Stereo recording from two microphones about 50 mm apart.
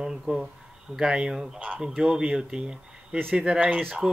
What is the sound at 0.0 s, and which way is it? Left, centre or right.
Speech, centre.